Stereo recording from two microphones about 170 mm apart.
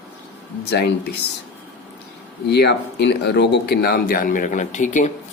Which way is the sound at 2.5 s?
80° left.